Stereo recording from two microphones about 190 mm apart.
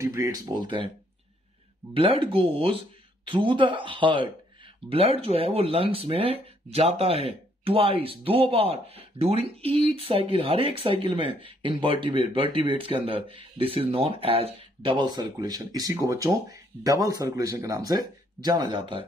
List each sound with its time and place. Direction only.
0.0 s speech: 15° right (ahead or behind)
2.0 s speech: 30° right (ahead or behind)